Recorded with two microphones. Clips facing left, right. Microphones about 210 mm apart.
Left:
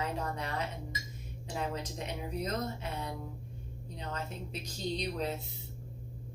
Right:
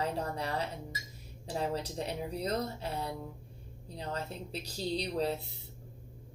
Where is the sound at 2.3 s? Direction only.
35° right (ahead or behind).